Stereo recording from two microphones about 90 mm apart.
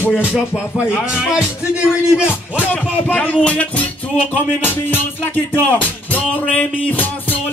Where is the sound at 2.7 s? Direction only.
15° left (ahead or behind).